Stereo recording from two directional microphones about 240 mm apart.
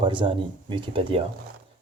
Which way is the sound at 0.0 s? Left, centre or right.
Centre.